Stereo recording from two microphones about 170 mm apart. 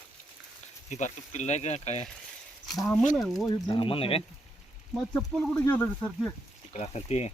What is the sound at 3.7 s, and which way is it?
Speech, 30° left (ahead or behind).